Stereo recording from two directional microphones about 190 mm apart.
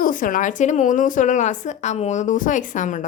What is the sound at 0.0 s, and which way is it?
A woman's voice, 45° left (ahead or behind).